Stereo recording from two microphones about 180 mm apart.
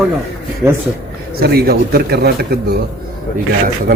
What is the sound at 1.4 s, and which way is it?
Speech, 60° right (ahead or behind).